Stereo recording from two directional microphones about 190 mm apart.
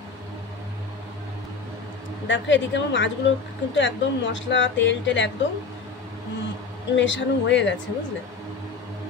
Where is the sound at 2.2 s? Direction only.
75° left (ahead or behind).